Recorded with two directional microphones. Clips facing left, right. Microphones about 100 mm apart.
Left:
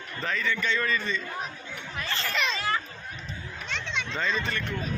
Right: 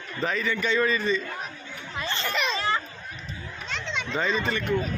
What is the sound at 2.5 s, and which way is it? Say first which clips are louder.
Children playing: right 3 dB; 35° right (ahead or behind).